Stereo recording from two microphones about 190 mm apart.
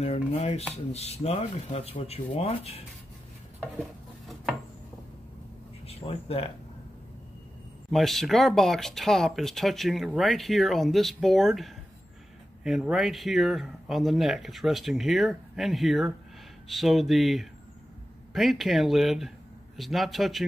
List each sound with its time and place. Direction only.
0.0 s speech: 35° left (ahead or behind)
5.9 s speech: 30° left (ahead or behind)
7.9 s speech: centre (ahead or behind)